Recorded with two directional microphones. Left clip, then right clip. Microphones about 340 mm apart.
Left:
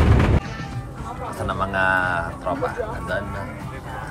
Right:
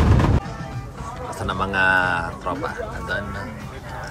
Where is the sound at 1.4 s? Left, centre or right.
Centre.